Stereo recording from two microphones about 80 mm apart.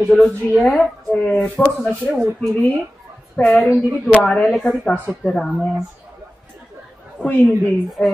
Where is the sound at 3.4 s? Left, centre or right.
Centre.